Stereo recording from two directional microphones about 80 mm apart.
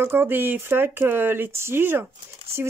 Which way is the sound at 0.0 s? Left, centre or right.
Right.